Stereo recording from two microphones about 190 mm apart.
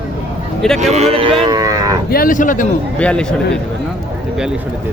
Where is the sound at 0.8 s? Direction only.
35° right (ahead or behind); by 2.0 s 20° right (ahead or behind).